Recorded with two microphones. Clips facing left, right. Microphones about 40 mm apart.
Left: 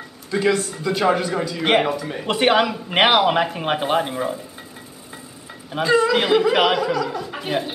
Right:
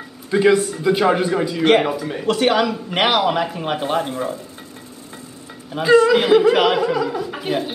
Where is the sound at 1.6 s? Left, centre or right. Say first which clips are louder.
Right 3 dB; centre.